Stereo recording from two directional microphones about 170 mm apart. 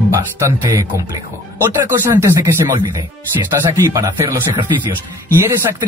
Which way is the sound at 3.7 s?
20° right (ahead or behind).